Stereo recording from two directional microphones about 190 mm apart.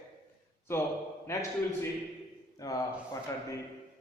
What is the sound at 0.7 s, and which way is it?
Speech, 15° left (ahead or behind).